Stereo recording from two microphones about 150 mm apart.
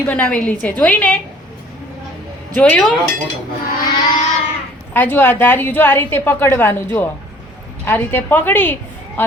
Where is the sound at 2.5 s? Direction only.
10° left (ahead or behind).